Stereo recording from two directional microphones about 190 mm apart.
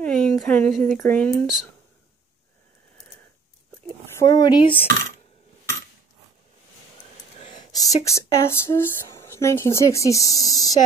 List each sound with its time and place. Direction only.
0.0 s speech: 5° left (ahead or behind)
4.1 s speech: 15° left (ahead or behind)
7.5 s speech: 20° left (ahead or behind)